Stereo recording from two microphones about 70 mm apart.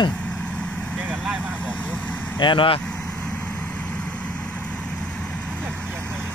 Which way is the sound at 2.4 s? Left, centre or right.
Left.